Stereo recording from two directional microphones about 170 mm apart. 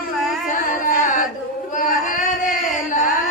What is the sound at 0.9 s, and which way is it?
Singing, 50° left (ahead or behind).